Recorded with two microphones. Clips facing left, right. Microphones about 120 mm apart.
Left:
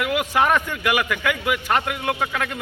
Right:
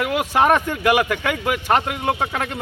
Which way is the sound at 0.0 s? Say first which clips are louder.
Right 2 dB; 35° right (ahead or behind).